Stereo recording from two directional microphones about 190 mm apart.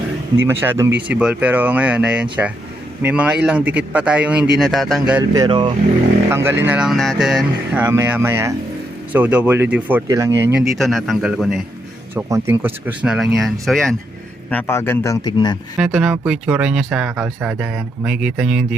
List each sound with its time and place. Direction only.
0.3 s speech: 10° right (ahead or behind)
5.3 s speech: 20° right (ahead or behind)
6.3 s speech: 10° right (ahead or behind)
10.6 s speech: centre (ahead or behind)
14.5 s speech: 10° left (ahead or behind)
15.8 s speech: 5° right (ahead or behind)